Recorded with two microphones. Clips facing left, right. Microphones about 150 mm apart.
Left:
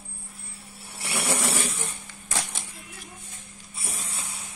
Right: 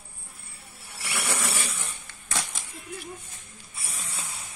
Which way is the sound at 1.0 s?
30° left (ahead or behind).